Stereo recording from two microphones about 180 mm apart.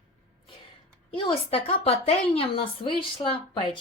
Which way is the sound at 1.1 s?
30° left (ahead or behind).